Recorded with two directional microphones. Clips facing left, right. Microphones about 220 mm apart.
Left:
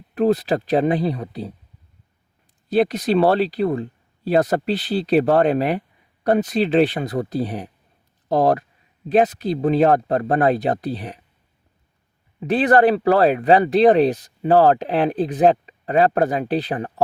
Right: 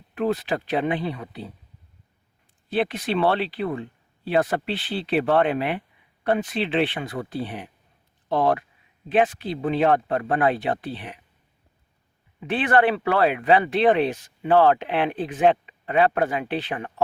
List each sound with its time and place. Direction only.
0.1 s speech: 35° left (ahead or behind)
2.6 s speech: 40° left (ahead or behind)
12.4 s speech: 40° left (ahead or behind)